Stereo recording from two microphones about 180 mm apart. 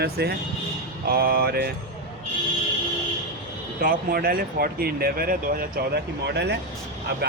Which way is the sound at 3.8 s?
50° right (ahead or behind).